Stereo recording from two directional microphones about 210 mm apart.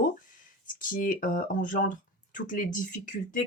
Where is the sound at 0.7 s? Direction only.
40° left (ahead or behind).